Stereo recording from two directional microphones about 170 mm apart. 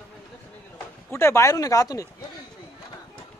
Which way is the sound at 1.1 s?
15° left (ahead or behind).